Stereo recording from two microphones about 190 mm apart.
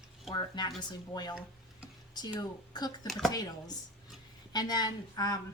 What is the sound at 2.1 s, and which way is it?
Speech, 20° left (ahead or behind).